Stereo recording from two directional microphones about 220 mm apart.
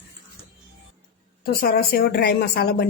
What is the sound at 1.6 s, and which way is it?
Speech, 40° left (ahead or behind).